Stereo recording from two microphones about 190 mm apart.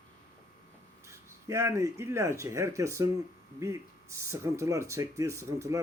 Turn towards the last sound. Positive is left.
turn(degrees=-15)  # may be behind; listen again after turning